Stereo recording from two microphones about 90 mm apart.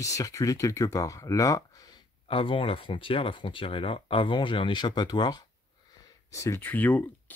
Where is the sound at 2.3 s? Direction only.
75° left (ahead or behind); by 5.4 s 50° left (ahead or behind).